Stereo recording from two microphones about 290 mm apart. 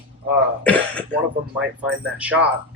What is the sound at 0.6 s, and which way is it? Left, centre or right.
Speech, centre.